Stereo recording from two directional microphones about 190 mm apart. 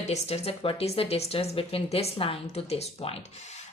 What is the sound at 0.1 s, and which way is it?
A woman's voice, 35° left (ahead or behind).